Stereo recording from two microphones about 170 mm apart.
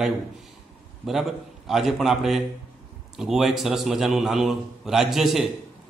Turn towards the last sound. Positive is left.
turn(degrees=0)  # may be behind; listen again after turning